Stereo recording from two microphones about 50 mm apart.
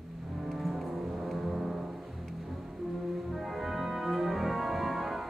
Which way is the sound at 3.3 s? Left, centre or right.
Centre.